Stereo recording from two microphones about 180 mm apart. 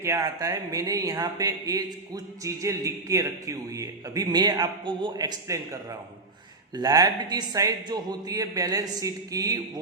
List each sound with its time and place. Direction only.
0.0 s speech: 15° right (ahead or behind)